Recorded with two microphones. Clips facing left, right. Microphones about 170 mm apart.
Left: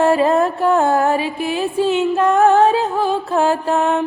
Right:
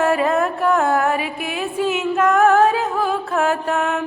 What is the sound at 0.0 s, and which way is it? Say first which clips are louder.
Music: left 3 dB; 30° left (ahead or behind).